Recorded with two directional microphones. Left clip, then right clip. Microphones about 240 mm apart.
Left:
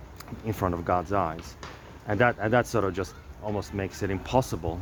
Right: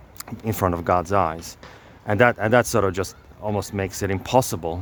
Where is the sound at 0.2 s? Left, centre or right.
Right.